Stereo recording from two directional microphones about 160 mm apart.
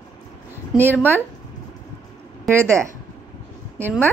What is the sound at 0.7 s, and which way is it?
Speech, 10° right (ahead or behind).